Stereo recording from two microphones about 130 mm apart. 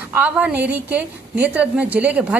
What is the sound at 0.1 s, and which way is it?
A woman's voice, 10° right (ahead or behind).